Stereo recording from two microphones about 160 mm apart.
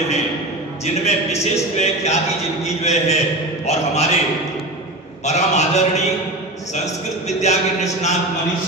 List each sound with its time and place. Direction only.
1.0 s speech: 45° left (ahead or behind)
5.2 s speech: 45° left (ahead or behind)
7.2 s speech: 45° left (ahead or behind)